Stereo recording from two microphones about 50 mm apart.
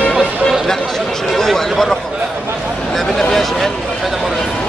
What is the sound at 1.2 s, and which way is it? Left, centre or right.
Speech, centre.